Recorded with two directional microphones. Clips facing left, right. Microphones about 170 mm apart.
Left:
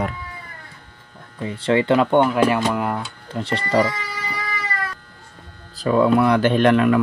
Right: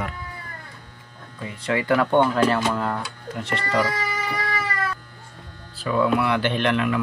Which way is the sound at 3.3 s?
30° left (ahead or behind).